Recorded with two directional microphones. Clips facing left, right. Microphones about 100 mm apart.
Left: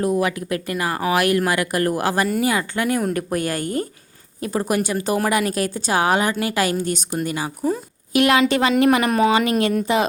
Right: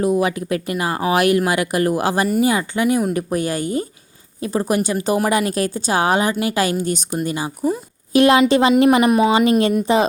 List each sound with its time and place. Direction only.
0.0 s a woman's voice: 20° right (ahead or behind)
9.0 s a woman's voice: 15° right (ahead or behind)
9.3 s speech: 25° right (ahead or behind)